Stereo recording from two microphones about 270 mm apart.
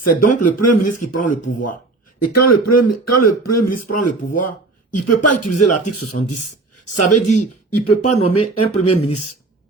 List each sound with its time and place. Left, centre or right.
0.4 s a man's voice: left